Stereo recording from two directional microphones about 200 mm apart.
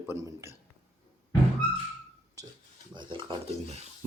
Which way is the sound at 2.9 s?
25° right (ahead or behind).